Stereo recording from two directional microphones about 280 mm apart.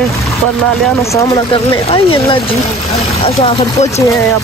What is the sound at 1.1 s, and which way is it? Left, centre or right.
Speech, centre.